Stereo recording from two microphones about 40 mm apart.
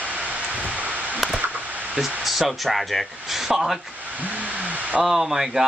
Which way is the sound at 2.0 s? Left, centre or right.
Centre.